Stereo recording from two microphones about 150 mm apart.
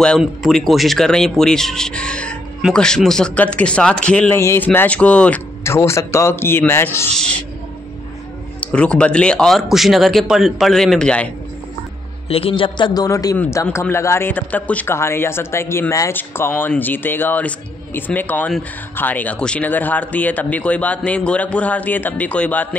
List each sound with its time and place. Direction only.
0.0 s speech: 5° left (ahead or behind)
4.4 s speech: 20° left (ahead or behind)
4.6 s a man's voice: 10° left (ahead or behind)
8.5 s speech: 5° left (ahead or behind)
12.3 s a man's voice: 40° left (ahead or behind); by 22.8 s 10° left (ahead or behind)